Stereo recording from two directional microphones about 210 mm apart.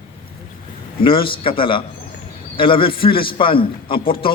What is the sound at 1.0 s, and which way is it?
A man's voice, 25° left (ahead or behind).